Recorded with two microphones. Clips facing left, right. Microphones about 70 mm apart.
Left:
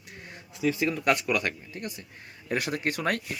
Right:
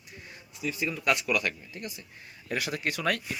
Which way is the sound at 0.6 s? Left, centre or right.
Left.